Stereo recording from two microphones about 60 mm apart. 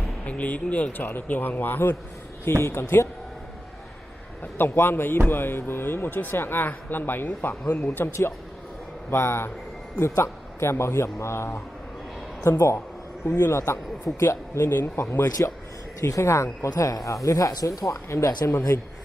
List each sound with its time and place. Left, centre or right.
0.2 s a man's voice: left
4.6 s a man's voice: left
16.0 s speech: left
16.6 s speech: left